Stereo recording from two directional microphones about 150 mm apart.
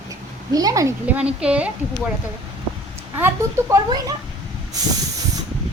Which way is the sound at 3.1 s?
15° right (ahead or behind).